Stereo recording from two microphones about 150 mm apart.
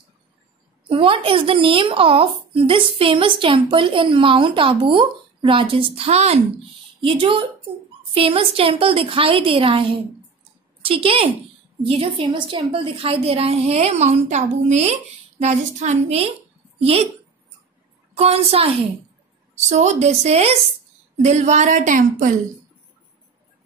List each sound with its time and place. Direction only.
0.8 s a woman's voice: 35° right (ahead or behind)
18.1 s a woman's voice: 45° right (ahead or behind); by 22.3 s 60° right (ahead or behind)